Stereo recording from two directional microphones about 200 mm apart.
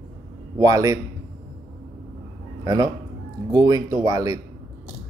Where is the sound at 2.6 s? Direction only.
20° right (ahead or behind).